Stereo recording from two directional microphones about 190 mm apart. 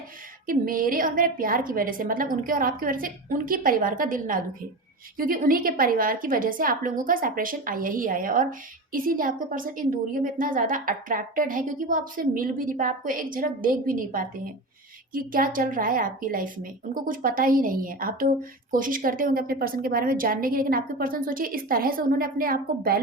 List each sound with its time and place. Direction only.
0.4 s a woman's voice: 50° right (ahead or behind)